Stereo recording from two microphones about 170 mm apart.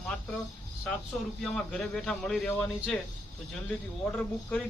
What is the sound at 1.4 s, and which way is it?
Speech, centre (ahead or behind).